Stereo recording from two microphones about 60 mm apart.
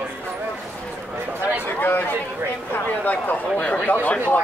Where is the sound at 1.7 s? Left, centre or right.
Left.